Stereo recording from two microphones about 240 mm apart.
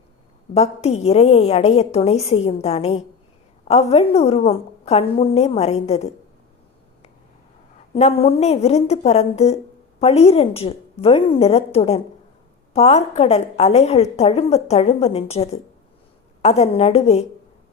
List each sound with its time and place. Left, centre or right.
0.5 s a woman's voice: left
7.9 s a woman's voice: left